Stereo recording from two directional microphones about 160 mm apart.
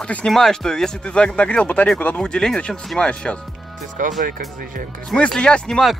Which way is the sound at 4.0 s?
55° right (ahead or behind).